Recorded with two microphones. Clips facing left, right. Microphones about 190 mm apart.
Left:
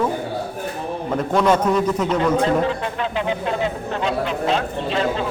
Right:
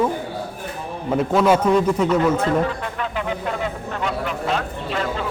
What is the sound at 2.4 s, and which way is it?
Speech, 25° left (ahead or behind).